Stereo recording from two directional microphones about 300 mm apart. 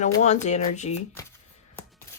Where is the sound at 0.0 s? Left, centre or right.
Left.